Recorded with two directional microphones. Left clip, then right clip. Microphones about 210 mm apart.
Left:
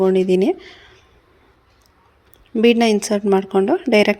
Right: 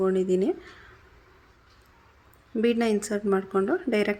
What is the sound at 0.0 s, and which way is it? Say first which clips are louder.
Speech: left 8 dB; 20° left (ahead or behind).